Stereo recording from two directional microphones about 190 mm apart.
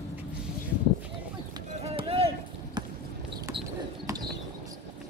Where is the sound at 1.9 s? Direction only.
30° right (ahead or behind).